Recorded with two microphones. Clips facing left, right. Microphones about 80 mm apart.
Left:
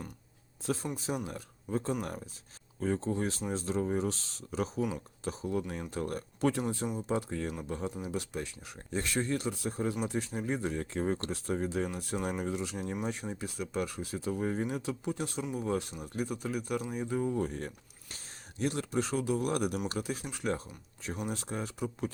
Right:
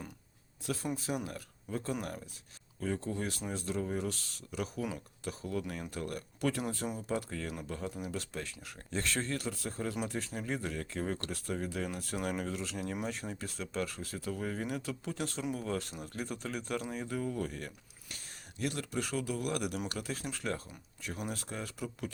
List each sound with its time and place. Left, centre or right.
0.6 s speech: left
19.9 s speech: left